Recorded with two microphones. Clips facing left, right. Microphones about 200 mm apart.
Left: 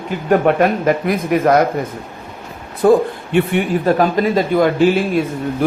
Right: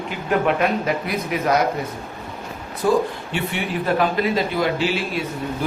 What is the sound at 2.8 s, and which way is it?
Speech, 55° left (ahead or behind).